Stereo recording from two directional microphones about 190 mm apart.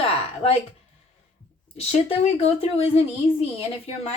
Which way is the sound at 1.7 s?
35° left (ahead or behind).